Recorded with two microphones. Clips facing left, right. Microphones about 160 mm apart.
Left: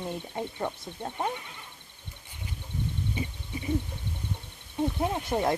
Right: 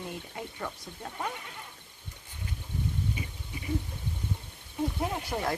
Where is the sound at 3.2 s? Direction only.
30° left (ahead or behind).